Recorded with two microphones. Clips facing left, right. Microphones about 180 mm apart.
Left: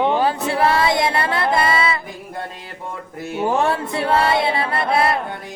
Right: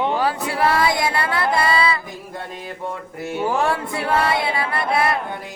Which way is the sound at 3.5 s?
25° left (ahead or behind).